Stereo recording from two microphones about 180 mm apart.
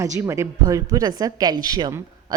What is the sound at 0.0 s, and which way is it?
A woman's voice, 15° right (ahead or behind).